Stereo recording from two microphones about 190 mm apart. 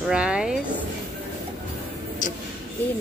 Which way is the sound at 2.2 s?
40° left (ahead or behind).